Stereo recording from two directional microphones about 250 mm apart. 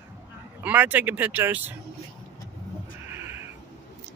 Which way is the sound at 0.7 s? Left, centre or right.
Centre.